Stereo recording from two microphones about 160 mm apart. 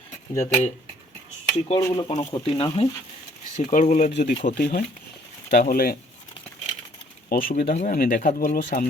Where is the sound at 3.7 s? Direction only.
50° left (ahead or behind); by 6.0 s 70° left (ahead or behind).